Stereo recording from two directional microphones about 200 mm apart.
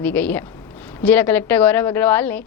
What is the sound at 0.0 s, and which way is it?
A woman's voice, 10° left (ahead or behind).